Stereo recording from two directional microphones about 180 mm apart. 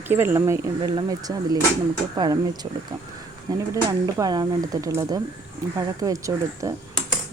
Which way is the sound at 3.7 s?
20° right (ahead or behind).